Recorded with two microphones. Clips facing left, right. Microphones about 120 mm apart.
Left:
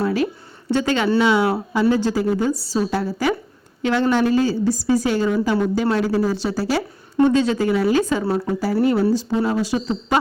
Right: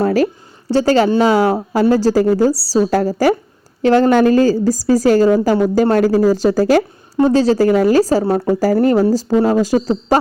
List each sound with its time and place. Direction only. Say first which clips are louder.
0.0 s a sound: right 6 dB; 40° right (ahead or behind)
0.7 s a woman's voice: right 6 dB; 35° right (ahead or behind)
7.2 s a woman's voice: right 4 dB; 35° right (ahead or behind)
7.7 s a woman's voice: right 6 dB; 45° right (ahead or behind)
8.2 s a woman's voice: right 6 dB; 50° right (ahead or behind)